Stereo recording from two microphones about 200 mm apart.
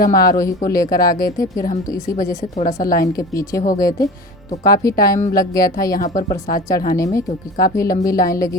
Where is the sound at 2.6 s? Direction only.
40° left (ahead or behind).